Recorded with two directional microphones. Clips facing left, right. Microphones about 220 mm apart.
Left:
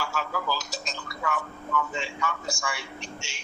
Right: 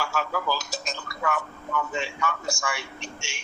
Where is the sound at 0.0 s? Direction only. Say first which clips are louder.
Right 3 dB; 50° right (ahead or behind).